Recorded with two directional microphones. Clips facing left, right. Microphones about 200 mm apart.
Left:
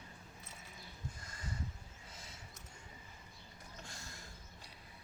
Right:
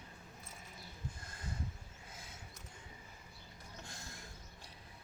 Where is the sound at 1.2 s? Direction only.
55° right (ahead or behind).